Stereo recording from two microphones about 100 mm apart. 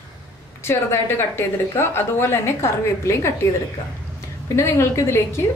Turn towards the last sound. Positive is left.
turn(degrees=25)  # may be behind; listen again after turning